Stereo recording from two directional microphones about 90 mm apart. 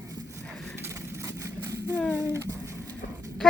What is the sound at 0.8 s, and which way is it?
Vehicle, 30° right (ahead or behind).